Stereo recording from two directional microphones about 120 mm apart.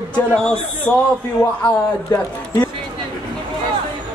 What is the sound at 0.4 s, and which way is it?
Speech, 5° left (ahead or behind).